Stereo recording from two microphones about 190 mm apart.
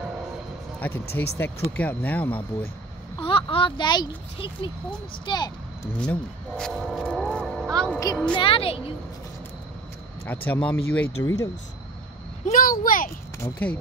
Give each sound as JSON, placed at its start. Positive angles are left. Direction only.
{"t": 0.7, "sound": "speech", "side_deg": 10}
{"t": 3.2, "sound": "speech", "side_deg": 30}
{"t": 5.9, "sound": "speech", "side_deg": 5}
{"t": 8.4, "sound": "speech", "side_deg": 30}
{"t": 10.2, "sound": "speech", "side_deg": 10}
{"t": 12.4, "sound": "speech", "side_deg": 45}
{"t": 13.4, "sound": "speech", "side_deg": 5}